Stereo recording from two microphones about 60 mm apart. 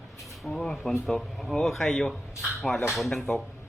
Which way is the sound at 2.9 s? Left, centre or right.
Centre.